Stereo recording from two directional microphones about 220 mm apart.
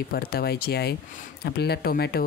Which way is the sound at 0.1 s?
45° left (ahead or behind).